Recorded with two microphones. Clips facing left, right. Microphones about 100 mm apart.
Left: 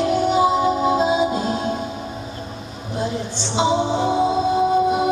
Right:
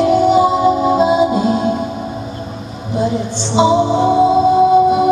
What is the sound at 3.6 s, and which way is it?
Music, 50° right (ahead or behind).